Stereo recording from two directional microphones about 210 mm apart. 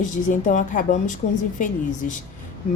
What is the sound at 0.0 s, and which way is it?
A woman's voice, 35° left (ahead or behind).